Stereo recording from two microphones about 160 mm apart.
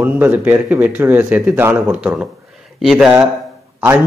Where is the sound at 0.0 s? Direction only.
15° right (ahead or behind).